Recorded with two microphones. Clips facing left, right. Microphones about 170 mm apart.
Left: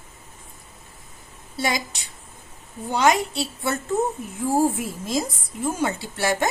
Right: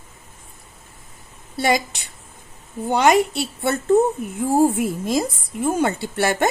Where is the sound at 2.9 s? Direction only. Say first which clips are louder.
Right 4 dB; 60° right (ahead or behind).